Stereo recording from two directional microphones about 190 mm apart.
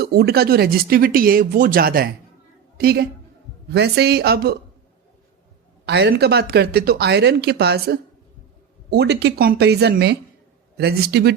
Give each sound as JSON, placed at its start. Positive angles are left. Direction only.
{"t": 0.0, "sound": "speech", "side_deg": -55}
{"t": 5.8, "sound": "speech", "side_deg": -60}